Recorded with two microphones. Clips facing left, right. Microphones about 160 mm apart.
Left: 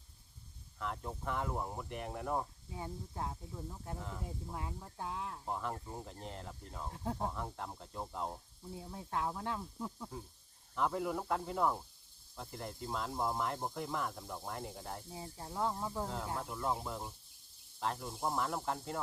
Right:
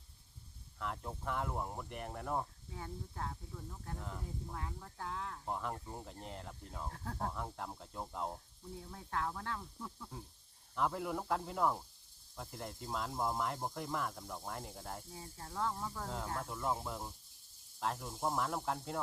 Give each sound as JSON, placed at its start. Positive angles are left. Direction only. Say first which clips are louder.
{"t": 0.8, "sound": "speech", "louder": "left 1 dB", "side_deg": 0}
{"t": 2.6, "sound": "speech", "louder": "left 2 dB", "side_deg": 20}
{"t": 3.9, "sound": "speech", "louder": "even", "side_deg": 0}
{"t": 4.5, "sound": "speech", "louder": "left 2 dB", "side_deg": 20}
{"t": 5.5, "sound": "speech", "louder": "even", "side_deg": 0}
{"t": 6.9, "sound": "speech", "louder": "left 5 dB", "side_deg": 20}
{"t": 7.3, "sound": "speech", "louder": "left 1 dB", "side_deg": 0}
{"t": 8.7, "sound": "speech", "louder": "left 2 dB", "side_deg": 20}
{"t": 10.8, "sound": "speech", "louder": "left 1 dB", "side_deg": 0}
{"t": 15.1, "sound": "speech", "louder": "left 2 dB", "side_deg": 20}
{"t": 16.0, "sound": "speech", "louder": "left 1 dB", "side_deg": 0}